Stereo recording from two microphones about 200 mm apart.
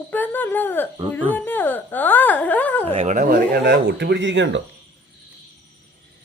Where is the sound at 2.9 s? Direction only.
30° right (ahead or behind); by 4.6 s 65° right (ahead or behind).